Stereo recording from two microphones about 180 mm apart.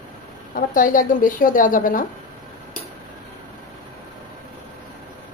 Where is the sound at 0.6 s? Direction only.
50° left (ahead or behind).